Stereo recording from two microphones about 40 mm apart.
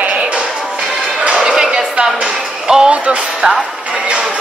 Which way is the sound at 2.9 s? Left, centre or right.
Right.